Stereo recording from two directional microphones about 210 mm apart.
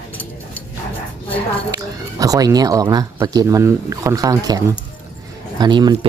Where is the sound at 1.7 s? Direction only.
15° right (ahead or behind).